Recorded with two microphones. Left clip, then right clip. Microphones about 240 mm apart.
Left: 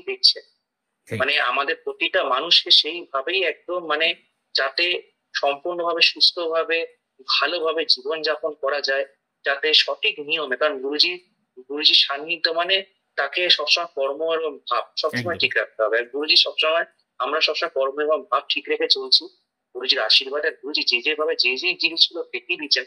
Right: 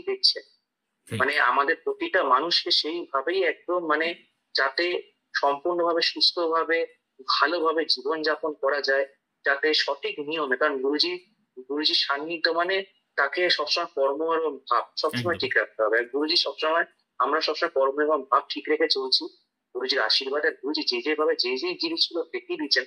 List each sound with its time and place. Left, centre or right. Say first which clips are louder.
1.5 s speech: even; centre